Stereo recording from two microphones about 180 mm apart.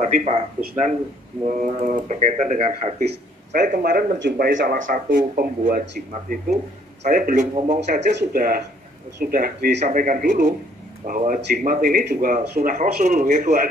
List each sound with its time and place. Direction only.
0.0 s speech: 40° right (ahead or behind)
8.1 s speech: 60° right (ahead or behind)